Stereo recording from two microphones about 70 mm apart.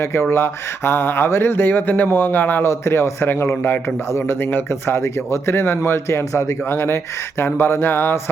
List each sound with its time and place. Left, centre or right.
0.0 s speech: left